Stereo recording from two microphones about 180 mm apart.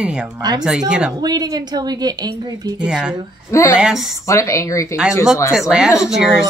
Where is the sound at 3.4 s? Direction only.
15° left (ahead or behind).